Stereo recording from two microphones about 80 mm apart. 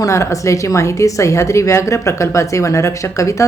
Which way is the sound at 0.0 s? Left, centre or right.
Left.